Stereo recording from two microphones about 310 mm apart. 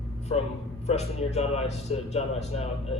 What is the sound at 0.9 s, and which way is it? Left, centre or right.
Speech, left.